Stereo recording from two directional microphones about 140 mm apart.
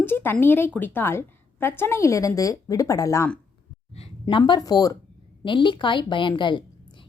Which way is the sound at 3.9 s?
40° left (ahead or behind).